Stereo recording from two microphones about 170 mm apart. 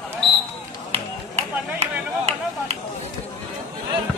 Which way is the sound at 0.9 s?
40° right (ahead or behind).